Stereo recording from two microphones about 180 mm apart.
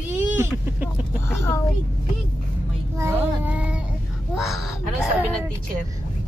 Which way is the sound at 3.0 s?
10° right (ahead or behind).